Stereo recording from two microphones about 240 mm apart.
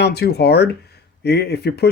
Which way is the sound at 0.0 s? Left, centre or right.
Left.